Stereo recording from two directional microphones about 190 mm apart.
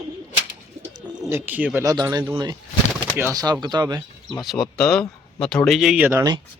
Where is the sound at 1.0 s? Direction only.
10° right (ahead or behind).